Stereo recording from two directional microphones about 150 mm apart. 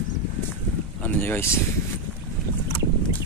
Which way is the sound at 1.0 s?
15° left (ahead or behind).